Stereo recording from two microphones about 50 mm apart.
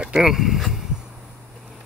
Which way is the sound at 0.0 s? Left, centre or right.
Centre.